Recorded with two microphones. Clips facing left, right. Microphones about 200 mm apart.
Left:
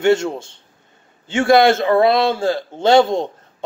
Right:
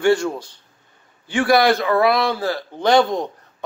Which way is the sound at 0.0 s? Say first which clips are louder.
Left 2 dB; 25° left (ahead or behind).